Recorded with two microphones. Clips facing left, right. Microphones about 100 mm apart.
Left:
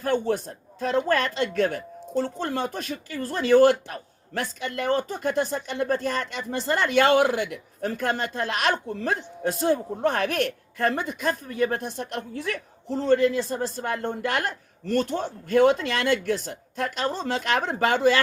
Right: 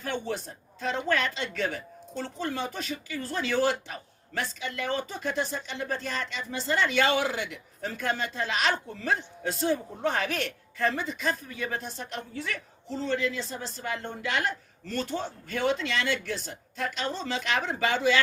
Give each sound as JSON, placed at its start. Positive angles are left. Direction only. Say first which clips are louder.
{"t": 0.0, "sound": "speech", "louder": "left 8 dB", "side_deg": 50}